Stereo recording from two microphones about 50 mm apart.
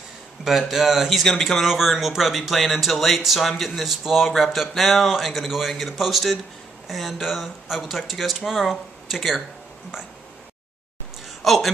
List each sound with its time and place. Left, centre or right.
0.5 s speech: centre
11.4 s speech: centre